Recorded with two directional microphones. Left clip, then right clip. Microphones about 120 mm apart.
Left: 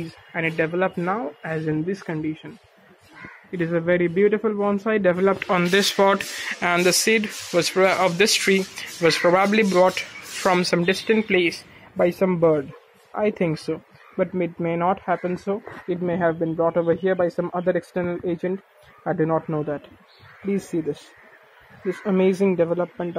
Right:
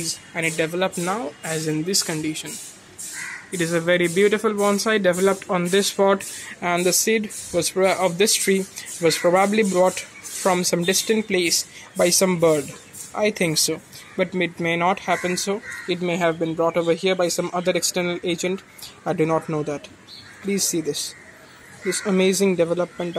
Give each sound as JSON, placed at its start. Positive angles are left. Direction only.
{"t": 0.3, "sound": "speech", "side_deg": -20}
{"t": 3.5, "sound": "speech", "side_deg": -20}
{"t": 12.0, "sound": "speech", "side_deg": -35}